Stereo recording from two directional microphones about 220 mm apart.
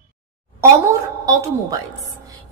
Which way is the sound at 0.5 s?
15° right (ahead or behind).